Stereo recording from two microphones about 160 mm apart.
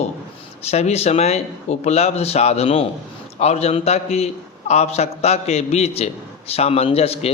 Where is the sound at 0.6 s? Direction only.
40° left (ahead or behind).